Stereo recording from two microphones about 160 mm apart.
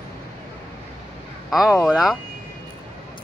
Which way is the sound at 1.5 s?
Centre (ahead or behind).